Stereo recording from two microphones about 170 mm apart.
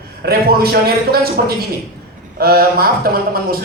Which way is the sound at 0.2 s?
65° right (ahead or behind).